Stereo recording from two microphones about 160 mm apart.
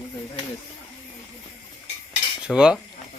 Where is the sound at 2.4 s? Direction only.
5° right (ahead or behind).